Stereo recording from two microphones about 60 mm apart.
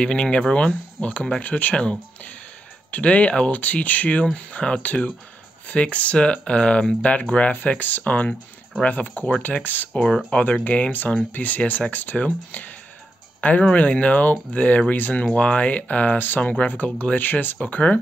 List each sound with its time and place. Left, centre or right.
0.0 s speech: centre
9.9 s speech: centre